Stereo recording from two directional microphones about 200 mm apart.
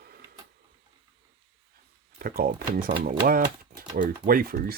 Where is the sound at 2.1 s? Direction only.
45° right (ahead or behind).